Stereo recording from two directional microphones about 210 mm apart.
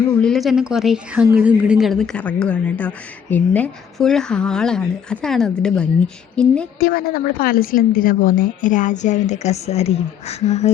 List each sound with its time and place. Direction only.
0.2 s a woman's voice: centre (ahead or behind)
6.7 s a woman's voice: 45° left (ahead or behind); by 10.7 s 30° left (ahead or behind)